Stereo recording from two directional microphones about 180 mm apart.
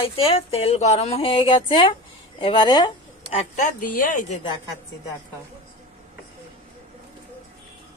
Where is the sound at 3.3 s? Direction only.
45° left (ahead or behind).